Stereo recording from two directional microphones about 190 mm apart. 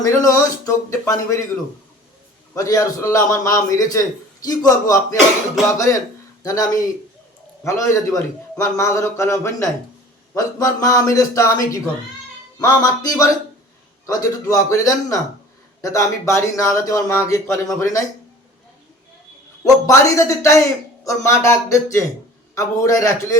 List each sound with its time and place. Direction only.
0.0 s a man's voice: 20° left (ahead or behind)
2.6 s a man's voice: 15° left (ahead or behind)
12.5 s music: 20° left (ahead or behind)
14.1 s a man's voice: 15° left (ahead or behind)
19.6 s a man's voice: 15° left (ahead or behind)